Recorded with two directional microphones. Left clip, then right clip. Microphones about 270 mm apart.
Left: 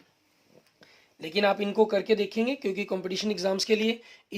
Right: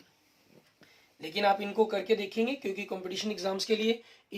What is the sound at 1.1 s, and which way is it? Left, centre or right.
Speech, left.